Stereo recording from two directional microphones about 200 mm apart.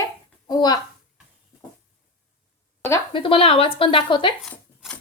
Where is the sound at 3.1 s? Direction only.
25° left (ahead or behind).